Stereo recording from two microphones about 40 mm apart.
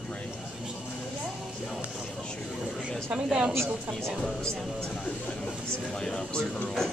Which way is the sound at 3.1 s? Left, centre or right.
Centre.